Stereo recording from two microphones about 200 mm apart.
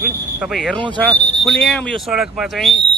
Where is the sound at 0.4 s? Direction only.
Centre (ahead or behind).